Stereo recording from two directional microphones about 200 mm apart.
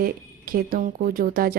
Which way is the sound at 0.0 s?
45° right (ahead or behind).